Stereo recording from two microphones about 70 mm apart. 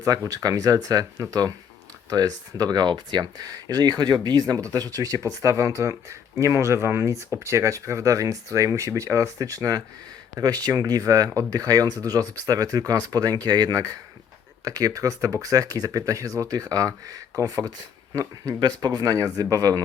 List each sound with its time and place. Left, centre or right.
0.0 s speech: right
19.1 s speech: right